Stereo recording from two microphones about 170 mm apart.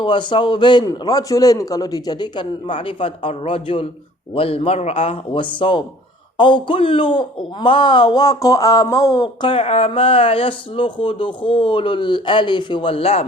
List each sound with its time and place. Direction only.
0.0 s speech: 30° left (ahead or behind)